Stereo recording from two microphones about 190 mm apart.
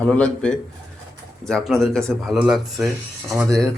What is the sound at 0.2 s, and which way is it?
A man's voice, 5° left (ahead or behind).